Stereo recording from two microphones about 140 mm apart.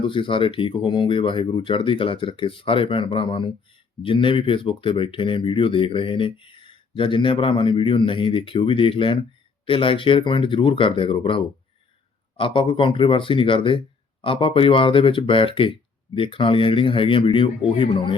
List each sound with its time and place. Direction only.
0.0 s speech: 35° left (ahead or behind)